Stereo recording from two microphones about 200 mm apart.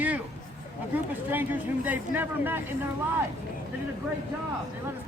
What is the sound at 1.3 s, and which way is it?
Speech, 10° right (ahead or behind).